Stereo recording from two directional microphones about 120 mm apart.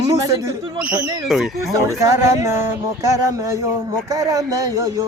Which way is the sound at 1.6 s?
25° right (ahead or behind).